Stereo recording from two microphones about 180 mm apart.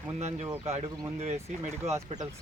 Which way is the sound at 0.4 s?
15° right (ahead or behind).